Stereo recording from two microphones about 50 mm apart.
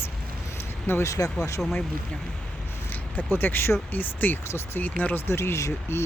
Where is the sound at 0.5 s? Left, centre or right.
Left.